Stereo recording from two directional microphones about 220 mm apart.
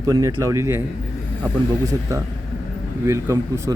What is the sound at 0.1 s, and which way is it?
Speech, 15° right (ahead or behind).